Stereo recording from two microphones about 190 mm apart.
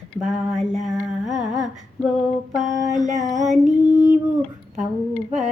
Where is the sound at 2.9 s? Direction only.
40° right (ahead or behind).